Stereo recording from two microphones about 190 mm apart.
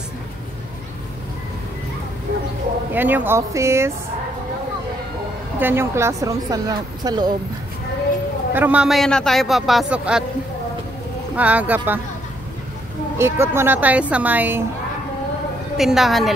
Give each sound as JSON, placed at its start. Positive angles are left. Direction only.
{"t": 2.9, "sound": "speech", "side_deg": -10}
{"t": 5.6, "sound": "speech", "side_deg": -10}
{"t": 8.5, "sound": "a man's voice", "side_deg": -10}
{"t": 11.3, "sound": "speech", "side_deg": -10}
{"t": 13.2, "sound": "speech", "side_deg": -15}
{"t": 15.8, "sound": "a man's voice", "side_deg": 0}